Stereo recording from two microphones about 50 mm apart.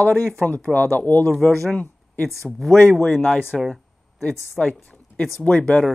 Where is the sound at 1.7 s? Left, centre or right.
Left.